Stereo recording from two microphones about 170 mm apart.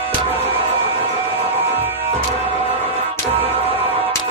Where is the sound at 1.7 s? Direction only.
10° right (ahead or behind).